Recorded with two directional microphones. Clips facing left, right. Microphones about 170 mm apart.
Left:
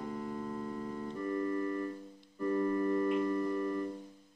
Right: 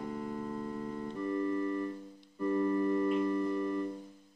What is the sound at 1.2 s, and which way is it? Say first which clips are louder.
Organ: right 1 dB; 20° right (ahead or behind).